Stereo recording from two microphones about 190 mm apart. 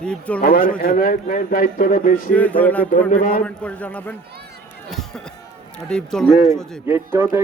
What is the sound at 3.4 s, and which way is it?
A man's voice, 5° left (ahead or behind).